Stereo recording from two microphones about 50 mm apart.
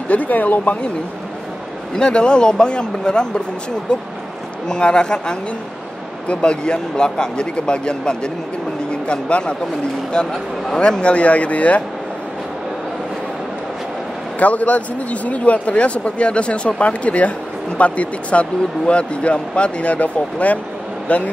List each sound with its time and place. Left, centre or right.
0.1 s speech: left
2.0 s speech: centre
4.6 s speech: centre
14.4 s speech: left